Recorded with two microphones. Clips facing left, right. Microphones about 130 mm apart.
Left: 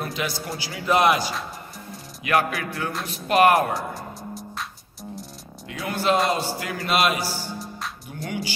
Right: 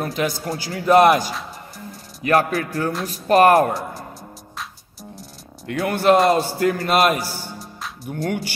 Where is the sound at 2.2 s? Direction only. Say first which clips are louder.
Right 4 dB; 40° right (ahead or behind).